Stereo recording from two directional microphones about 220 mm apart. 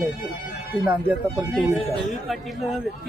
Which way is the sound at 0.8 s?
10° right (ahead or behind).